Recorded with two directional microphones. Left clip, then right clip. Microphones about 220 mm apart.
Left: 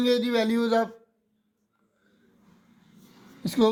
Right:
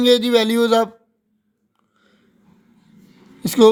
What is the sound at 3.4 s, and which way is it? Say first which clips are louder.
Speech: right 11 dB; 40° right (ahead or behind).